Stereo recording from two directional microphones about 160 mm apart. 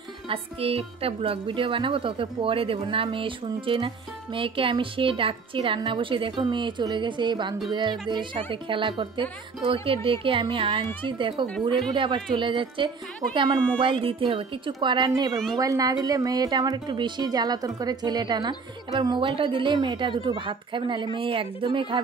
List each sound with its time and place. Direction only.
0.3 s a woman's voice: 35° right (ahead or behind)